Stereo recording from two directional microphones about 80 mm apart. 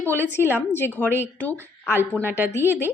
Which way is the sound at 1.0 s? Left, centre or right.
Right.